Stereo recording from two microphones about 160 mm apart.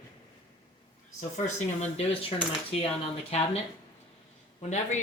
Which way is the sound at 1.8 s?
40° left (ahead or behind).